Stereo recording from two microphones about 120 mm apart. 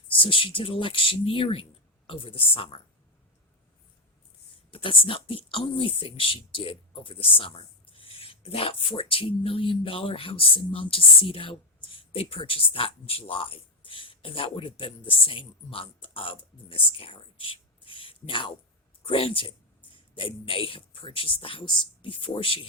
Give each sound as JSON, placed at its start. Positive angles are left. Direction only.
{"t": 0.2, "sound": "speech", "side_deg": 45}
{"t": 4.7, "sound": "speech", "side_deg": 45}